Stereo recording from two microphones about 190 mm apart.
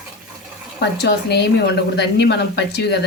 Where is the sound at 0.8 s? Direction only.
60° left (ahead or behind).